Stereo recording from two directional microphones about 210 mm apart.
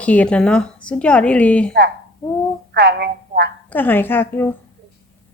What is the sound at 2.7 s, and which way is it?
Speech, 50° right (ahead or behind).